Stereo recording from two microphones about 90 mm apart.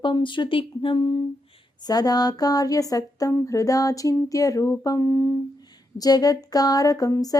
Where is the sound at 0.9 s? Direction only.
50° left (ahead or behind).